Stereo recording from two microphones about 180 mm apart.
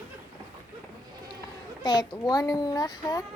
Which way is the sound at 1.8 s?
20° left (ahead or behind).